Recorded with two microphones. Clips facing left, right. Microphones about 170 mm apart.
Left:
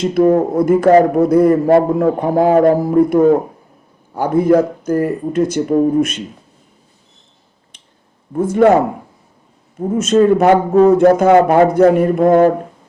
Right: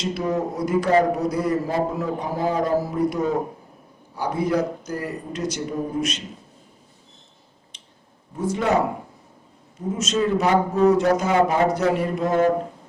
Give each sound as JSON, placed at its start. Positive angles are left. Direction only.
{"t": 0.0, "sound": "a man's voice", "side_deg": 50}
{"t": 7.7, "sound": "finger snapping", "side_deg": 55}
{"t": 8.3, "sound": "a man's voice", "side_deg": 55}
{"t": 9.9, "sound": "a man's voice", "side_deg": 55}